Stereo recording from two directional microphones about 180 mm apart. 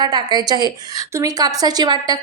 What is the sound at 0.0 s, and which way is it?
A woman's voice, 20° right (ahead or behind).